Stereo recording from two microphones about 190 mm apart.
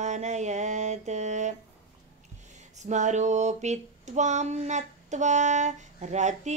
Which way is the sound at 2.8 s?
40° right (ahead or behind).